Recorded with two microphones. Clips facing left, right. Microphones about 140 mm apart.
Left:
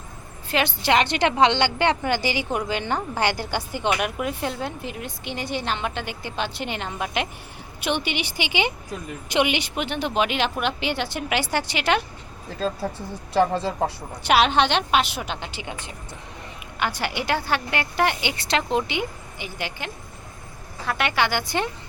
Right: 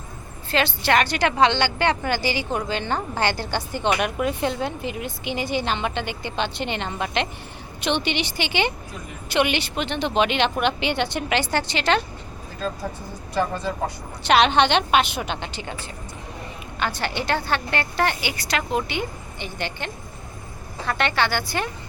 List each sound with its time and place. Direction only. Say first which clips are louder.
0.5 s a woman's voice: even; 15° left (ahead or behind)
13.3 s speech: left 4 dB; 30° left (ahead or behind)
14.3 s a woman's voice: right 1 dB; 5° left (ahead or behind)
15.6 s a woman's voice: right 1 dB; 15° left (ahead or behind)
19.4 s a woman's voice: right 2 dB; 5° left (ahead or behind)